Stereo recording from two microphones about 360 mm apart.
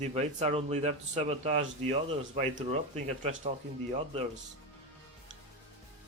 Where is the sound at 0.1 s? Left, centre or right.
Centre.